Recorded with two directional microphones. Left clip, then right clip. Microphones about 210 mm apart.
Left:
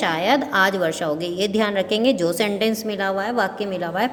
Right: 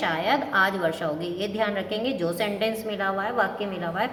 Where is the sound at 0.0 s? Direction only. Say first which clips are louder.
Left 5 dB; 50° left (ahead or behind).